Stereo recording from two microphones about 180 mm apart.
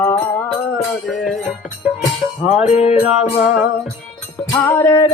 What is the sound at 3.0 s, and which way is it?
Music, 10° right (ahead or behind).